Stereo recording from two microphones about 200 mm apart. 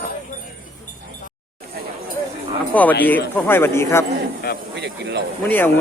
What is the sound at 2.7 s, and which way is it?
Speech, 10° left (ahead or behind).